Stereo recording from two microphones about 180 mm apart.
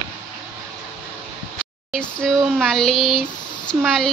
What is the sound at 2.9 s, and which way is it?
Speech, 30° left (ahead or behind).